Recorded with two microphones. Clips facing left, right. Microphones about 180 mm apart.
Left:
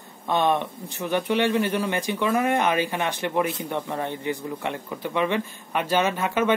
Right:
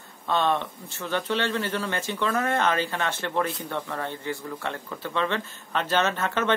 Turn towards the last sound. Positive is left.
turn(degrees=10)  # may be behind; listen again after turning